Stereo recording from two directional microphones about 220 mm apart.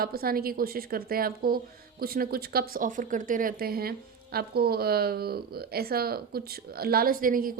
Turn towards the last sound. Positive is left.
turn(degrees=-40)  # may be behind; listen again after turning